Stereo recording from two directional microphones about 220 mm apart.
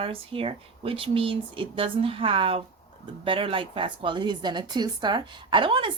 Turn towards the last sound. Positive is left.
turn(degrees=-25)  # may be behind; listen again after turning